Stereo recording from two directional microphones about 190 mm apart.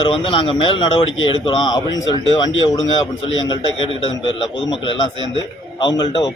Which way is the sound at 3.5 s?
25° left (ahead or behind).